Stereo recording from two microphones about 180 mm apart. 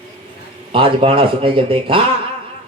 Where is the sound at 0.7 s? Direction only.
30° right (ahead or behind).